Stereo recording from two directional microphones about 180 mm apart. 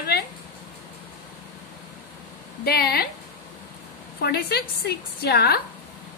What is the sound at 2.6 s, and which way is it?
Speech, 60° left (ahead or behind).